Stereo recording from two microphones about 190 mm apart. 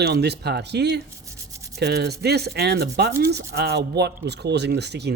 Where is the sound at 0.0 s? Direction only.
60° right (ahead or behind).